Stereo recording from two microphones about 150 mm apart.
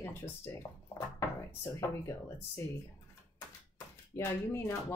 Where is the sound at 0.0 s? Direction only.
20° left (ahead or behind).